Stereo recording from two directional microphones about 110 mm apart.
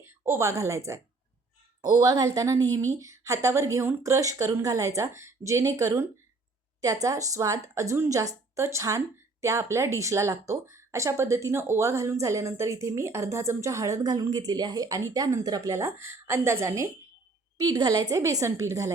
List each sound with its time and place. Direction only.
0.0 s a woman's voice: 20° right (ahead or behind)